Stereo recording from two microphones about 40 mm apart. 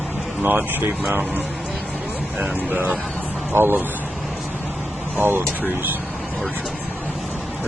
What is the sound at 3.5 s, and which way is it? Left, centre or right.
Speech, right.